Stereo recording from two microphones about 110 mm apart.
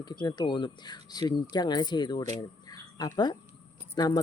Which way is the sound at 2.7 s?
35° left (ahead or behind).